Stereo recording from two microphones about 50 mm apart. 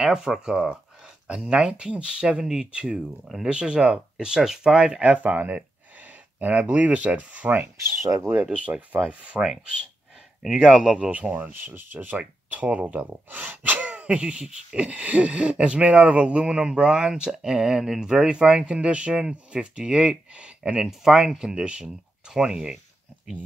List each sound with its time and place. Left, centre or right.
0.0 s speech: centre
1.0 s gasp: centre
3.4 s speech: centre
5.0 s speech: right
9.3 s speech: right
10.4 s speech: centre
11.1 s gasp: right
11.3 s speech: right
12.2 s speech: right
13.3 s gasp: right; by 17.3 s centre
17.3 s speech: centre